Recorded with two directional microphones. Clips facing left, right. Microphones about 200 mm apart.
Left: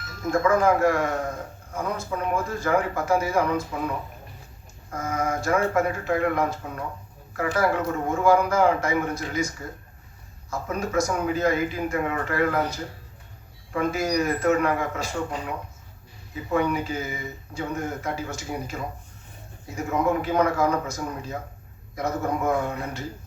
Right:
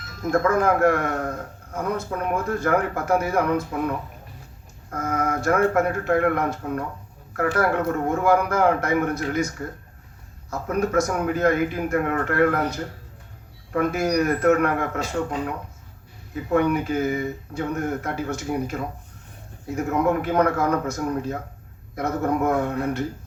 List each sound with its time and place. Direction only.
0.3 s speech: 60° right (ahead or behind)
16.3 s speech: 60° right (ahead or behind)